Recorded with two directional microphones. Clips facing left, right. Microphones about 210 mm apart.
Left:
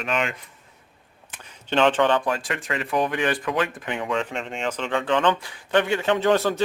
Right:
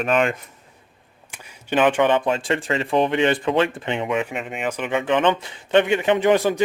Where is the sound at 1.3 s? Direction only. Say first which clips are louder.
Right 3 dB; 10° right (ahead or behind).